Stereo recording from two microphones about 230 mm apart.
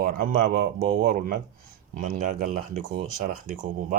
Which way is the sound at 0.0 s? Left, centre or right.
Right.